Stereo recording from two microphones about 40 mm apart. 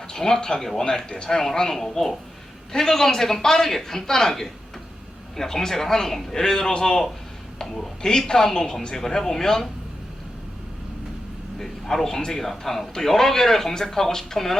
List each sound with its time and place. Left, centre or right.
0.1 s a man's voice: centre
1.4 s a man's voice: centre
11.6 s a man's voice: centre